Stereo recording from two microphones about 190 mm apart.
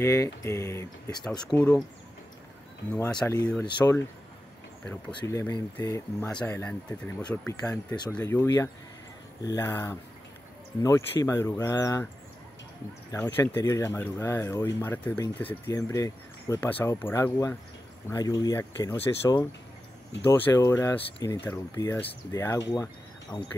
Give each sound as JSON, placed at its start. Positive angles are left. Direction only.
{"t": 0.0, "sound": "speech", "side_deg": 15}
{"t": 2.9, "sound": "speech", "side_deg": 5}
{"t": 3.6, "sound": "speech", "side_deg": 25}
{"t": 5.1, "sound": "speech", "side_deg": 15}
{"t": 13.1, "sound": "speech", "side_deg": 15}